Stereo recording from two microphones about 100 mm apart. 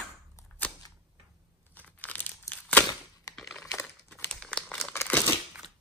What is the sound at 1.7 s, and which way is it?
Crumpling, 15° left (ahead or behind).